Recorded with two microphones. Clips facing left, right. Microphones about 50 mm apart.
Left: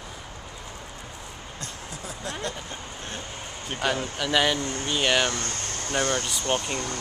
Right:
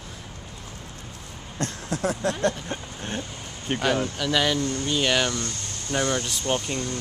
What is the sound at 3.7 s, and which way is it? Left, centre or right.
Speech, right.